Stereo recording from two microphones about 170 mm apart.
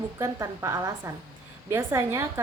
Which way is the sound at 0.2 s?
15° right (ahead or behind).